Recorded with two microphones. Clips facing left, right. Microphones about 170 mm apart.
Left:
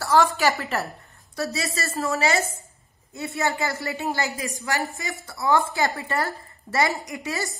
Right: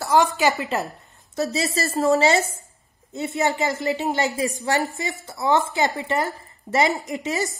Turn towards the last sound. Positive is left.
turn(degrees=-20)  # may be behind; listen again after turning